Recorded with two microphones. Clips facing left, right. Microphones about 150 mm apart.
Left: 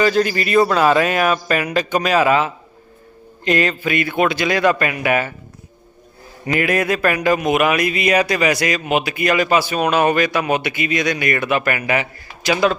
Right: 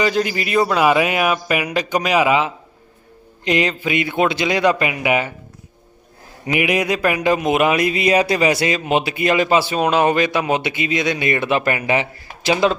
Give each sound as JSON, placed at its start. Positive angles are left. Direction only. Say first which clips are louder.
{"t": 0.0, "sound": "speech", "louder": "left 2 dB", "side_deg": -15}
{"t": 6.5, "sound": "speech", "louder": "even", "side_deg": -15}